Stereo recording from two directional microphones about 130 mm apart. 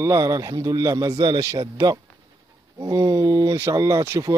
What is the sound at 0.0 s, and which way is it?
Speech, 25° right (ahead or behind).